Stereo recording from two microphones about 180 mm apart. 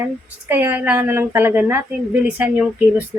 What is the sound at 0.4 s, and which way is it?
Speech, 10° right (ahead or behind).